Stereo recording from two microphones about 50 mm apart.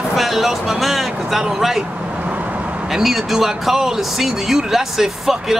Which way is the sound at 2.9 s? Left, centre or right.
Centre.